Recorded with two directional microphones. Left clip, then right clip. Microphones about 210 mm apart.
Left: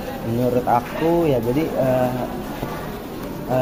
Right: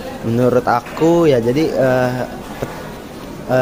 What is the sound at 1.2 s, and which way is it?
Speech, 40° right (ahead or behind).